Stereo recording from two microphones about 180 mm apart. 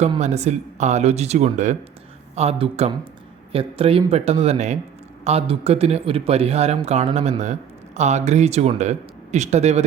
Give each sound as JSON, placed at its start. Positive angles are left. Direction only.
{"t": 0.2, "sound": "a man's voice", "side_deg": -40}